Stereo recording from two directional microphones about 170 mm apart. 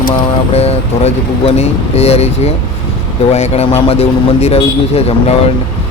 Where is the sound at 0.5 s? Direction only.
35° left (ahead or behind).